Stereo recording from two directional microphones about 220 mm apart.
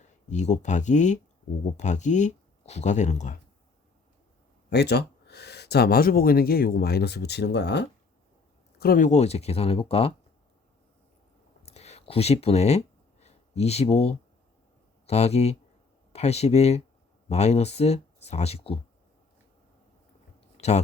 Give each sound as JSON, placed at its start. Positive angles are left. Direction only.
{"t": 0.0, "sound": "speech", "side_deg": 35}
{"t": 4.7, "sound": "speech", "side_deg": 50}
{"t": 8.8, "sound": "speech", "side_deg": 40}
{"t": 11.6, "sound": "a sound", "side_deg": 30}
{"t": 15.0, "sound": "speech", "side_deg": 30}
{"t": 20.6, "sound": "speech", "side_deg": 30}